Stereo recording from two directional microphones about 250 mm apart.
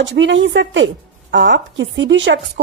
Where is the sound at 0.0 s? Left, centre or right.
Right.